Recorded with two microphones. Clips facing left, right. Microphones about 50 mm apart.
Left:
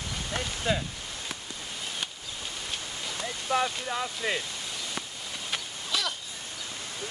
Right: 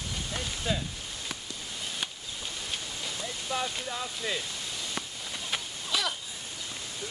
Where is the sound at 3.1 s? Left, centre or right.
Left.